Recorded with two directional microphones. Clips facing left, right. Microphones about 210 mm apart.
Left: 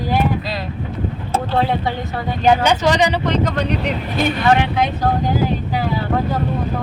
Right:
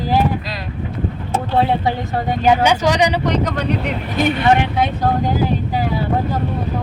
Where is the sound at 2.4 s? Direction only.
10° right (ahead or behind).